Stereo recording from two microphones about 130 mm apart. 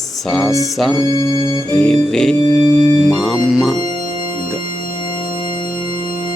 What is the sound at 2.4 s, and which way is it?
Organ, 30° left (ahead or behind).